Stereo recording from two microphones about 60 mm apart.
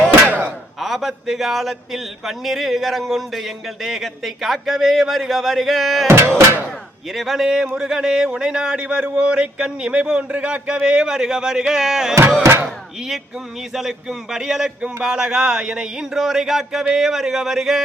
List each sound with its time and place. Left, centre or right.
0.3 s slam: right
0.8 s speech: centre
6.1 s a sound: right
7.1 s speech: centre
13.7 s speech: centre